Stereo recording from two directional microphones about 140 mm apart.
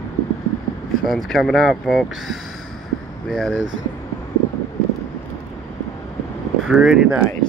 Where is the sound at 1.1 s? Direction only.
Centre (ahead or behind).